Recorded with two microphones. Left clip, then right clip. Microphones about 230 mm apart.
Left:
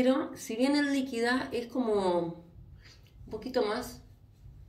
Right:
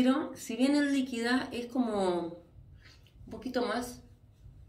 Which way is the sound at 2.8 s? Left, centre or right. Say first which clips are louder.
Left 3 dB; centre.